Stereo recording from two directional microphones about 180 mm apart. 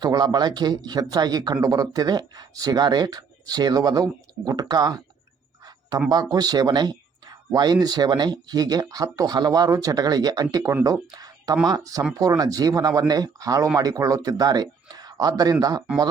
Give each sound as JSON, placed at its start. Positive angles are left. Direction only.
{"t": 0.0, "sound": "speech", "side_deg": -25}
{"t": 6.3, "sound": "a man's voice", "side_deg": -20}